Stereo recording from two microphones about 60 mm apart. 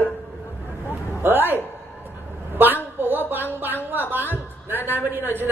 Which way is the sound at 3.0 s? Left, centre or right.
Right.